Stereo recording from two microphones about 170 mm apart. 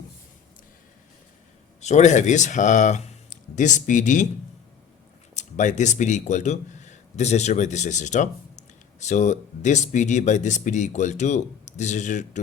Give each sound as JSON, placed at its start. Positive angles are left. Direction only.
{"t": 1.8, "sound": "speech", "side_deg": 45}
{"t": 5.3, "sound": "speech", "side_deg": 45}